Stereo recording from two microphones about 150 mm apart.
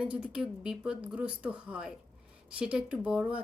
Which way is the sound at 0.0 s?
5° right (ahead or behind).